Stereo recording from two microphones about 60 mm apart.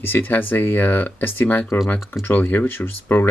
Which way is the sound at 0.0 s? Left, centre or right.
Left.